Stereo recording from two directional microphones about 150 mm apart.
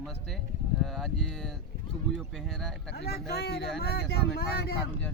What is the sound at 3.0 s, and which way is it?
Speech, 90° left.